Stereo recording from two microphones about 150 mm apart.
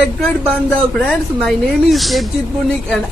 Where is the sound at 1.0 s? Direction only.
Centre (ahead or behind).